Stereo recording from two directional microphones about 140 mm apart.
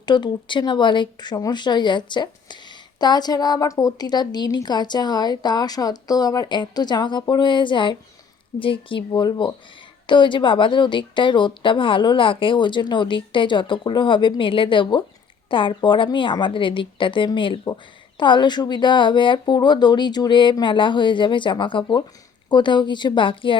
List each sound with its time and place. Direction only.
0.0 s speech: 30° left (ahead or behind)